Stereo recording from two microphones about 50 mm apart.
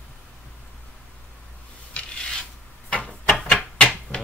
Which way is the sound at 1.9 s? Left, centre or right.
Centre.